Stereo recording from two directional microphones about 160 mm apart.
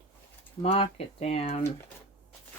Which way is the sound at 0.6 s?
35° left (ahead or behind).